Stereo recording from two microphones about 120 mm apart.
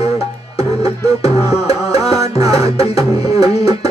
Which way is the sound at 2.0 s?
30° right (ahead or behind).